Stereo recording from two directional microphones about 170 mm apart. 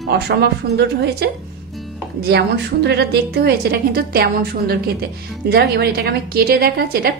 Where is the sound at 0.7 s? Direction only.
75° right (ahead or behind).